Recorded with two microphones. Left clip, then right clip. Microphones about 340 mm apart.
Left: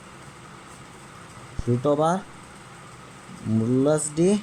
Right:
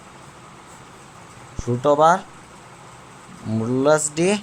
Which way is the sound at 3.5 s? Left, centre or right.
Right.